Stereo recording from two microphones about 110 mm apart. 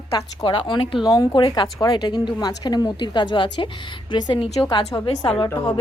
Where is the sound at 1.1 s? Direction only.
40° left (ahead or behind).